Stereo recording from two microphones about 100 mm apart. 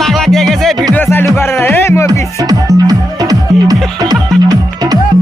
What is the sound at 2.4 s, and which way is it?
Music, 40° right (ahead or behind).